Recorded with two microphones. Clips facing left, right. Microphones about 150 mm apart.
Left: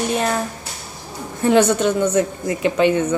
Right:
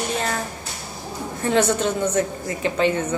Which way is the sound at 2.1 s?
20° left (ahead or behind).